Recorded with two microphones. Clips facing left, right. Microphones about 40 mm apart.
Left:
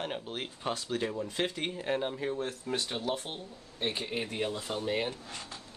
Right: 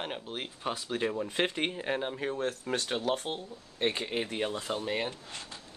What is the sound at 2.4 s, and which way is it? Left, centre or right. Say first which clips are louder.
Speech: right 2 dB; right.